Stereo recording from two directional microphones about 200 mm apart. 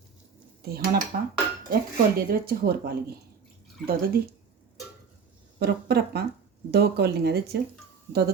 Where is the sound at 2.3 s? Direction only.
50° right (ahead or behind).